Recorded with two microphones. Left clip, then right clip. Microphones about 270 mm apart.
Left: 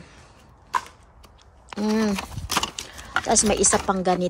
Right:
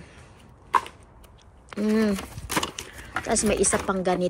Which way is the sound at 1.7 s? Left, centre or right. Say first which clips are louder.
Even; centre.